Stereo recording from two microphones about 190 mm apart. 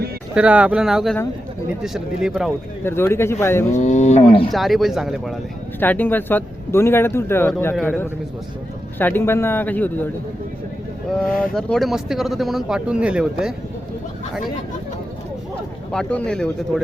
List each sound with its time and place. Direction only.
0.3 s speech: 5° right (ahead or behind)
2.8 s speech: 10° left (ahead or behind)
3.8 s speech: 40° left (ahead or behind)
4.5 s speech: centre (ahead or behind)
5.8 s speech: 10° left (ahead or behind)
11.1 s speech: 5° left (ahead or behind)
15.9 s speech: 5° left (ahead or behind)